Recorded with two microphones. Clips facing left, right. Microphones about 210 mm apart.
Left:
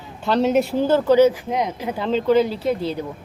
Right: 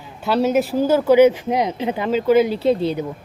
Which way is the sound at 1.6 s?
25° right (ahead or behind).